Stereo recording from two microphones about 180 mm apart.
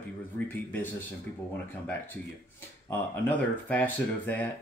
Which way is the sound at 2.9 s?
10° left (ahead or behind).